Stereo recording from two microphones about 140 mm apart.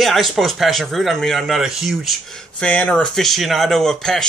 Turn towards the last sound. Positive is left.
turn(degrees=5)  # may be behind; listen again after turning